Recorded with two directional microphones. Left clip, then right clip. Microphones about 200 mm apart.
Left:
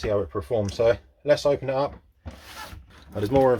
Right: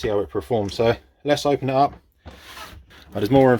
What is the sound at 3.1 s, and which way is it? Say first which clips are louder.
Speech: right 4 dB; 40° right (ahead or behind).